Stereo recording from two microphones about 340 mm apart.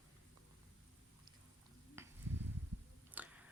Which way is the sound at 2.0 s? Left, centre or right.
Centre.